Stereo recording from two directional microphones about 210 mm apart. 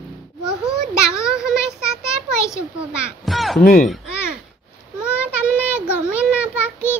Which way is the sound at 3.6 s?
40° left (ahead or behind).